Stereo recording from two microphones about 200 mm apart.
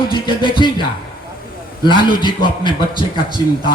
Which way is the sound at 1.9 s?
25° left (ahead or behind).